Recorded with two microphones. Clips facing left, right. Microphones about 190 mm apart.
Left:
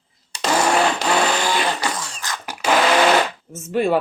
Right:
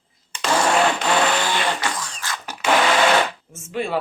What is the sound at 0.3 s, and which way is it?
Blender, 35° left (ahead or behind).